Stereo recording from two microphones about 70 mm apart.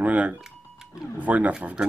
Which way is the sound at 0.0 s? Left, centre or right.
Centre.